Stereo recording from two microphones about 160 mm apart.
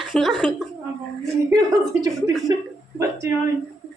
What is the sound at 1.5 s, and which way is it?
A woman's voice, 25° right (ahead or behind).